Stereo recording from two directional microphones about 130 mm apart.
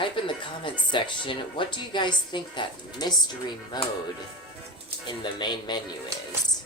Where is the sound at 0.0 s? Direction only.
40° left (ahead or behind).